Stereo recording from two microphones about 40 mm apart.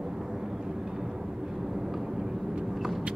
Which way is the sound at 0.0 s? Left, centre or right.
Centre.